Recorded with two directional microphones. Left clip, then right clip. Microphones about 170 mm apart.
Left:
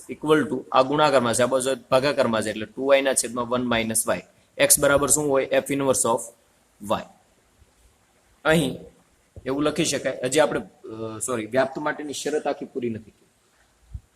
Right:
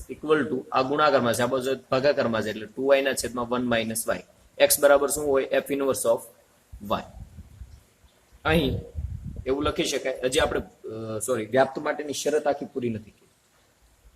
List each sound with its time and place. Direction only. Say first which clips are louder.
0.3 s a man's voice: left 3 dB; 55° left (ahead or behind)
8.4 s a man's voice: left 3 dB; 45° left (ahead or behind); by 13.0 s 20° left (ahead or behind)